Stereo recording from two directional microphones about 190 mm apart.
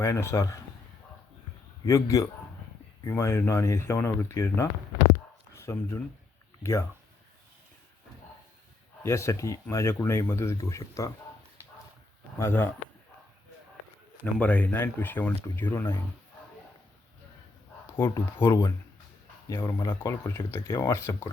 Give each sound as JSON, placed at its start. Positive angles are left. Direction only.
{"t": 0.0, "sound": "speech", "side_deg": 15}
{"t": 1.8, "sound": "speech", "side_deg": 15}
{"t": 9.0, "sound": "speech", "side_deg": 15}
{"t": 12.4, "sound": "speech", "side_deg": 10}
{"t": 14.3, "sound": "speech", "side_deg": 10}
{"t": 17.9, "sound": "speech", "side_deg": 10}